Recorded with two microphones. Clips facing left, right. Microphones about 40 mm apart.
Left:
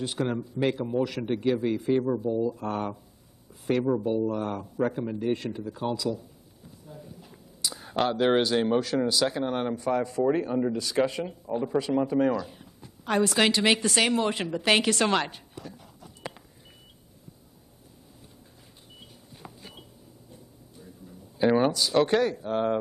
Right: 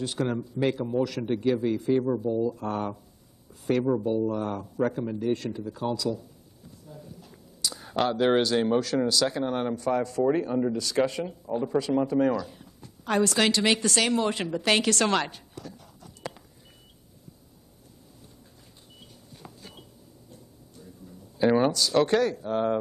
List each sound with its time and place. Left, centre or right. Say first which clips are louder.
0.0 s a man's voice: even; centre
2.0 s a woman's voice: even; centre
4.3 s a woman's voice: even; centre
15.3 s a sound: even; centre
18.9 s vehicle: even; centre
21.4 s a woman's voice: even; centre